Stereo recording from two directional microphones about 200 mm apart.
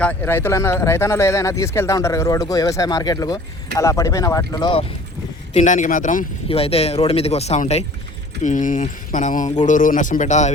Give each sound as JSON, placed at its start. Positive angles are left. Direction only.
{"t": 0.0, "sound": "speech", "side_deg": 10}
{"t": 5.5, "sound": "speech", "side_deg": 40}